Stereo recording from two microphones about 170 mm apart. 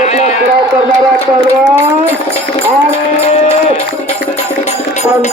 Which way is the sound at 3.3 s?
40° left (ahead or behind).